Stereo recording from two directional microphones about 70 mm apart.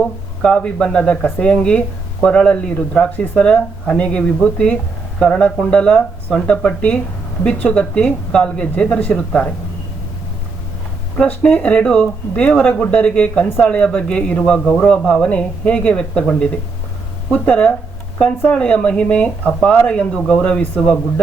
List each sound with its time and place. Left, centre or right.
0.0 s speech: centre
11.2 s speech: centre
17.3 s speech: centre